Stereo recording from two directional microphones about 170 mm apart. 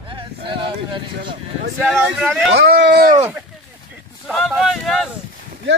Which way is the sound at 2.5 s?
70° right (ahead or behind).